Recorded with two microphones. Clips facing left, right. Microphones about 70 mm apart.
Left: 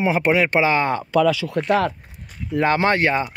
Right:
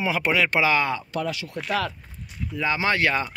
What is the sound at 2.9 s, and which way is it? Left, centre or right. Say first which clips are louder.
Speech: left 4 dB; left.